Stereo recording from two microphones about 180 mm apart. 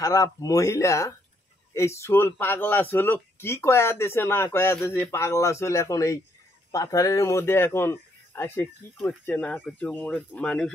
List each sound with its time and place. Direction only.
0.0 s speech: 20° left (ahead or behind)